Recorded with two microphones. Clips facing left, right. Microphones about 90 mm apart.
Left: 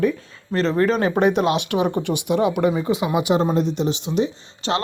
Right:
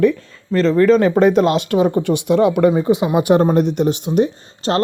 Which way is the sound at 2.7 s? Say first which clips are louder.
Right 5 dB; 30° right (ahead or behind).